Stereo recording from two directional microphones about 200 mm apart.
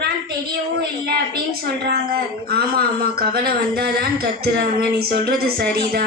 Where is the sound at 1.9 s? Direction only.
50° right (ahead or behind).